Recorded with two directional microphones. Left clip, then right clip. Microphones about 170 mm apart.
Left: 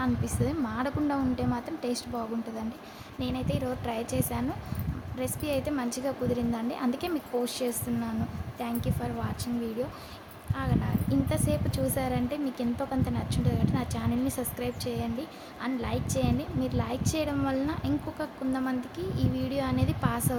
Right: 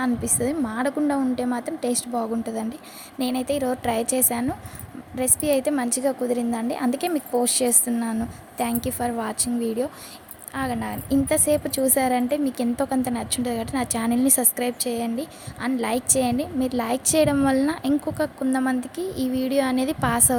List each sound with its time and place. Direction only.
0.0 s a woman's voice: 25° right (ahead or behind)
10.5 s a woman's voice: 35° right (ahead or behind)